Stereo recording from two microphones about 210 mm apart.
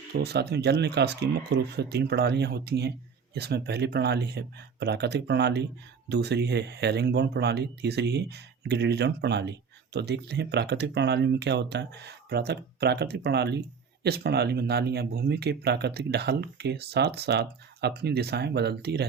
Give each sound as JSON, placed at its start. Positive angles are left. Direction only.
{"t": 0.1, "sound": "speech", "side_deg": -50}